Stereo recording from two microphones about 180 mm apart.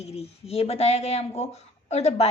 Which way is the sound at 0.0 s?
35° left (ahead or behind).